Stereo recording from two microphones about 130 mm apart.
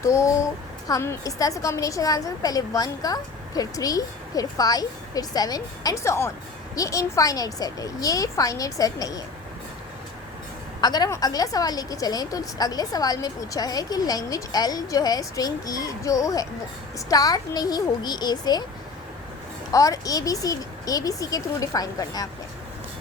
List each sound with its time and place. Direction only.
0.0 s a woman's voice: 25° left (ahead or behind)
10.8 s a woman's voice: 30° left (ahead or behind)
19.7 s a woman's voice: 25° left (ahead or behind)